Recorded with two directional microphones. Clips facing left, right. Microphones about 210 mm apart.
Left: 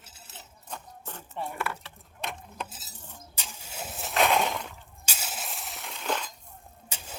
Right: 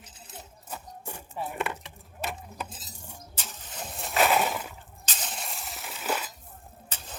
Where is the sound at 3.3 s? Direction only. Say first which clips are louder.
Left 1 dB; 10° left (ahead or behind); by 4.8 s 5° right (ahead or behind).